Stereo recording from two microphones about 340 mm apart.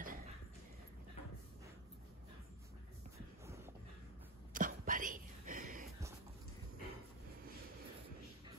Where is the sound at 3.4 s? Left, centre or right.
Centre.